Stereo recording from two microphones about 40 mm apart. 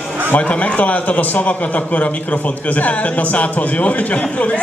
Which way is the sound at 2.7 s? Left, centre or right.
Left.